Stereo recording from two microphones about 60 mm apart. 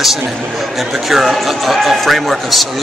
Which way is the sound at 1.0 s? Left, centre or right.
Centre.